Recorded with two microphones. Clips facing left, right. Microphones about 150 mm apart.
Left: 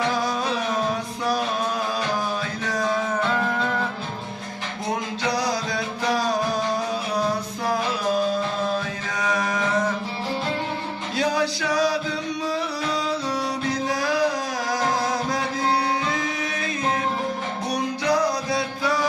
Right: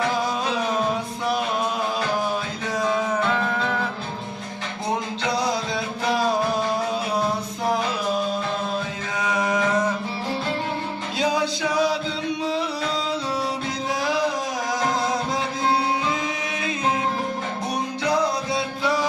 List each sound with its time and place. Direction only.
2.6 s music: 20° right (ahead or behind)
5.3 s music: 25° right (ahead or behind)
9.2 s music: 20° right (ahead or behind)
11.2 s male singing: 20° right (ahead or behind)
14.8 s music: 20° right (ahead or behind)
18.1 s music: 25° right (ahead or behind)